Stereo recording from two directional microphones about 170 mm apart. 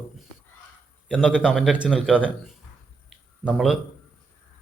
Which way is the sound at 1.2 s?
5° right (ahead or behind).